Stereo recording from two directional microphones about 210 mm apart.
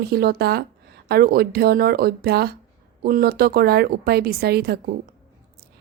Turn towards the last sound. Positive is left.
turn(degrees=-50)  # may be behind; listen again after turning